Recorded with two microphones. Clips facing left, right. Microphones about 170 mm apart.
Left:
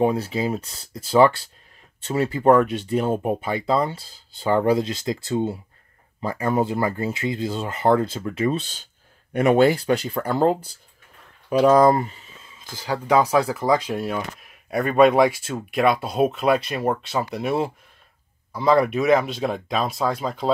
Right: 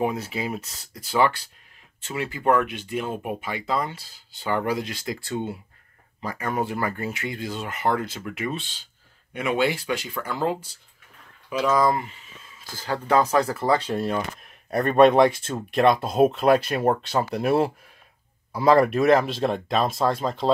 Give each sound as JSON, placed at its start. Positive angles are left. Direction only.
{"t": 0.0, "sound": "speech", "side_deg": 30}
{"t": 12.7, "sound": "speech", "side_deg": 10}